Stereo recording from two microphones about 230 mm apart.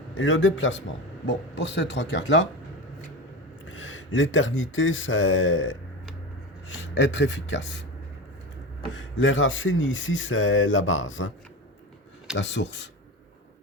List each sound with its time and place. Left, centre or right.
0.2 s speech: left
3.7 s speech: left
9.0 s speech: left
12.4 s speech: left